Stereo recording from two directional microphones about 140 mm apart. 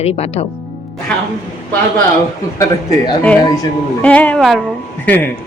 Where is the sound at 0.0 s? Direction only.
50° left (ahead or behind).